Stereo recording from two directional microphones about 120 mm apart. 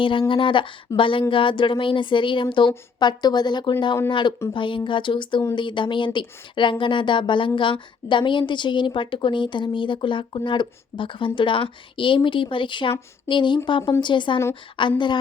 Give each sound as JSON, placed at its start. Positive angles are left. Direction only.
{"t": 0.0, "sound": "speech", "side_deg": 45}